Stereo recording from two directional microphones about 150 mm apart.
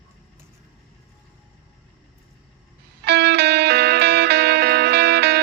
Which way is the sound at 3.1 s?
90° right.